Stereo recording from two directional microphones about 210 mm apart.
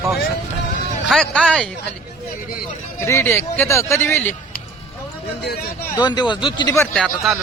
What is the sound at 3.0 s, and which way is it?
Speech, 10° left (ahead or behind).